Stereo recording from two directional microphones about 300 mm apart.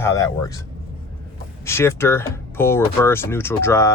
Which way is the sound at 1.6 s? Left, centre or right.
Centre.